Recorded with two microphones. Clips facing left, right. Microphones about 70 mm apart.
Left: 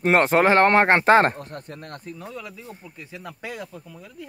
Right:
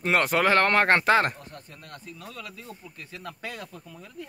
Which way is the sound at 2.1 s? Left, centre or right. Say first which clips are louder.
Left 4 dB; left.